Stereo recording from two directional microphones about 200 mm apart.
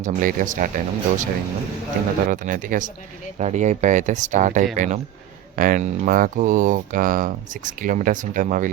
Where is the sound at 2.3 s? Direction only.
40° right (ahead or behind).